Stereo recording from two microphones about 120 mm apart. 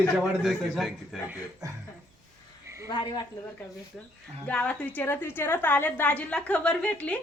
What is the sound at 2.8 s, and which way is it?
Speech, 35° left (ahead or behind).